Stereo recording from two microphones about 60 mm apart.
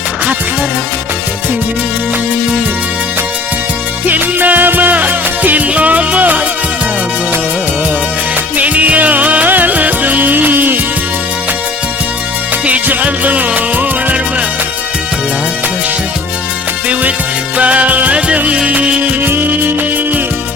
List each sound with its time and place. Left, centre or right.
4.0 s music: right
8.5 s music: right
12.6 s music: right
17.6 s music: right
19.2 s music: right